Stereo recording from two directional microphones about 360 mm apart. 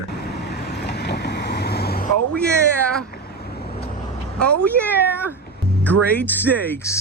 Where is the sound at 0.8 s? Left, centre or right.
Left.